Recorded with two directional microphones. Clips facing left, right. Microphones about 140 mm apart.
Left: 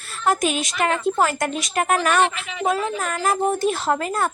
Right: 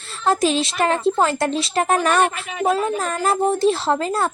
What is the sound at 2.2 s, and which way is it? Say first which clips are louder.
Speech: right 2 dB; 50° right (ahead or behind).